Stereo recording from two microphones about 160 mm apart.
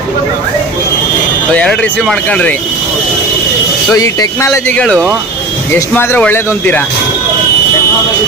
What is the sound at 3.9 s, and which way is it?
Speech, 20° left (ahead or behind).